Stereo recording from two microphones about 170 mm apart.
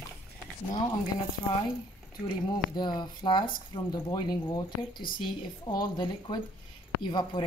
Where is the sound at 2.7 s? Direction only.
25° left (ahead or behind).